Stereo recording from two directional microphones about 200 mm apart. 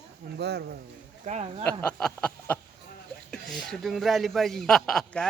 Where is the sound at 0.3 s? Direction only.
55° right (ahead or behind).